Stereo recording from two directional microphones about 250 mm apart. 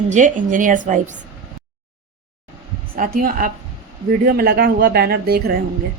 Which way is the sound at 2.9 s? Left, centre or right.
Right.